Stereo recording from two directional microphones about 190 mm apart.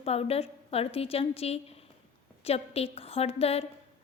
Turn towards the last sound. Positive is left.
turn(degrees=30)  # may be behind; listen again after turning